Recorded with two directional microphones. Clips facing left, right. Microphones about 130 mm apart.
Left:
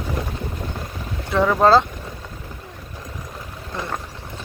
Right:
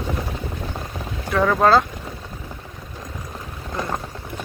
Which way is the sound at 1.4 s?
5° left (ahead or behind).